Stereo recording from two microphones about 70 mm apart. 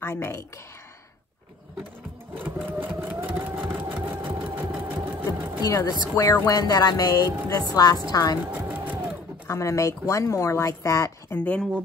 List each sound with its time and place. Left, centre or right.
0.0 s a woman's voice: left
2.3 s sewing machine: right
5.9 s speech: left
6.4 s music: left
7.4 s a woman's voice: left
8.5 s sewing machine: right
9.5 s speech: left
11.3 s speech: centre